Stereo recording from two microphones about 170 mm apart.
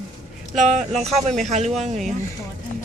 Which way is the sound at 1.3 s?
45° right (ahead or behind).